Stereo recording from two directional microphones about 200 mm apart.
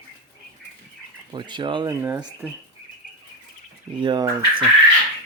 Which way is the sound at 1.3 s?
25° right (ahead or behind).